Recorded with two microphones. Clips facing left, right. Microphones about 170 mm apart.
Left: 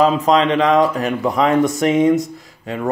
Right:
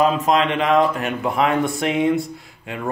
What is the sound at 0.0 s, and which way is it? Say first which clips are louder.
Speech: left 3 dB; 35° left (ahead or behind).